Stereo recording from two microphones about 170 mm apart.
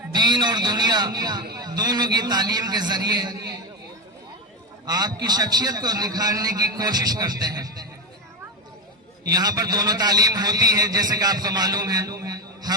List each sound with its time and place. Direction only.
0.1 s a man's voice: 25° right (ahead or behind)
4.9 s a man's voice: 25° right (ahead or behind)
9.3 s a man's voice: 25° right (ahead or behind)